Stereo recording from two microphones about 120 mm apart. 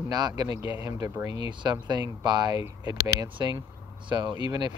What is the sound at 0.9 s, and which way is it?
Speech, 25° right (ahead or behind).